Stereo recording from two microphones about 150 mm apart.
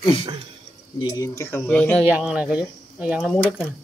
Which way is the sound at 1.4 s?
10° left (ahead or behind).